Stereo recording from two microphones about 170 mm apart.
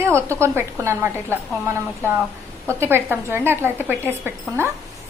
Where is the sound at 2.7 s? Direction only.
15° right (ahead or behind).